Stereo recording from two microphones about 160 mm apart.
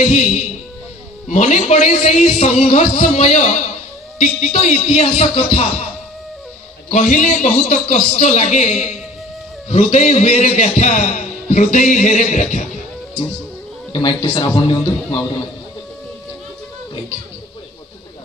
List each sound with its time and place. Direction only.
0.0 s a man's voice: 45° left (ahead or behind)
6.9 s a man's voice: 50° left (ahead or behind)
13.9 s a man's voice: 30° left (ahead or behind)